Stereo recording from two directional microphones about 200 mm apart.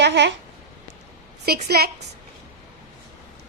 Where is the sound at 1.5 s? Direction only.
50° right (ahead or behind).